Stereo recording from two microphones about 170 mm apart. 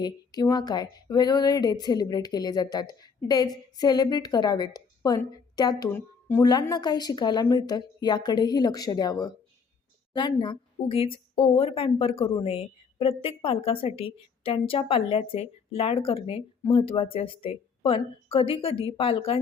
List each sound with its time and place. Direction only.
0.0 s speech: 25° left (ahead or behind)
5.9 s speech: 10° left (ahead or behind)
6.4 s a woman's voice: 25° left (ahead or behind)